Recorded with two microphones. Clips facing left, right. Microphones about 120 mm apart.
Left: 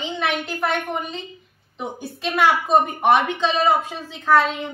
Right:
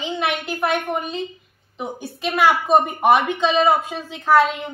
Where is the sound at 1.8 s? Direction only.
5° right (ahead or behind).